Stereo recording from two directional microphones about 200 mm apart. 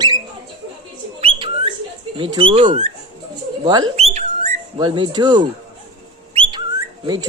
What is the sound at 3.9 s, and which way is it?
Whistling, 30° right (ahead or behind).